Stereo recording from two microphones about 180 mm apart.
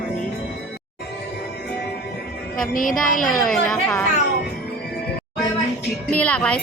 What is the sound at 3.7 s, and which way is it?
Speech, 15° left (ahead or behind).